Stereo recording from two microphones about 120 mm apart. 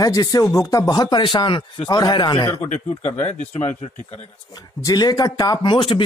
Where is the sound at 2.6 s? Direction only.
85° left.